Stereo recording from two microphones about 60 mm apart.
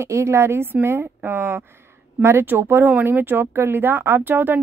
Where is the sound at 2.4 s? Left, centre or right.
Right.